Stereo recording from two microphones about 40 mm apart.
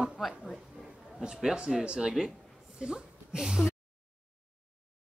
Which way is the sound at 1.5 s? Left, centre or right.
Right.